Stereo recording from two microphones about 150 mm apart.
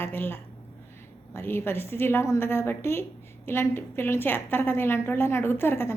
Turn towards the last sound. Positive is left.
turn(degrees=15)  # may be behind; listen again after turning